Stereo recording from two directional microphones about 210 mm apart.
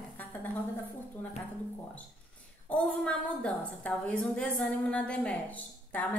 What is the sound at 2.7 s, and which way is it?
A woman's voice, 5° left (ahead or behind).